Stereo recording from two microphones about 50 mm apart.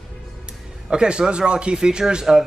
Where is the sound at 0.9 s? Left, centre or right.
Centre.